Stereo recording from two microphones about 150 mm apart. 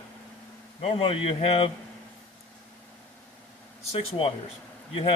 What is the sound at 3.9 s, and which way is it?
Speech, 40° left (ahead or behind).